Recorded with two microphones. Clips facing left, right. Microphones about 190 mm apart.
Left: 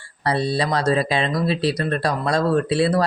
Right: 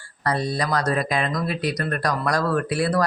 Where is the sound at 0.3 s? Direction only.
30° left (ahead or behind).